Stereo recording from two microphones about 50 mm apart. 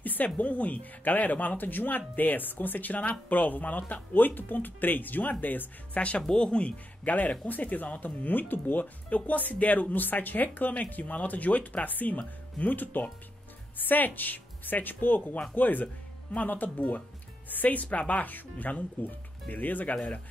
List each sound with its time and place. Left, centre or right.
0.0 s speech: left
7.1 s speech: left